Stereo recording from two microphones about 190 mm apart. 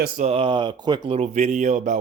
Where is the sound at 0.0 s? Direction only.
35° right (ahead or behind).